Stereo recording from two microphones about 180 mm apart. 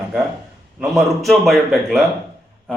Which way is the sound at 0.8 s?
Centre (ahead or behind).